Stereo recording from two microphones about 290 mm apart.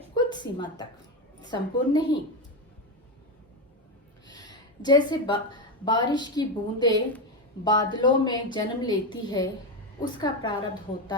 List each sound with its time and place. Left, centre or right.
0.3 s a woman's voice: centre
4.3 s a woman's voice: centre